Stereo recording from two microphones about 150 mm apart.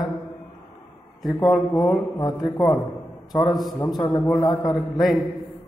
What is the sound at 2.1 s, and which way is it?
Speech, 25° left (ahead or behind).